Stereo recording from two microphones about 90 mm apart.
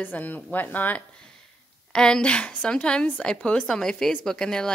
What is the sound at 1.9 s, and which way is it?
A woman's voice, 10° left (ahead or behind).